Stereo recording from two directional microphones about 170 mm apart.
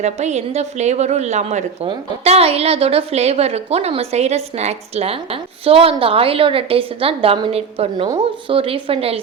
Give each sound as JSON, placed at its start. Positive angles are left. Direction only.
{"t": 0.0, "sound": "a woman's voice", "side_deg": -40}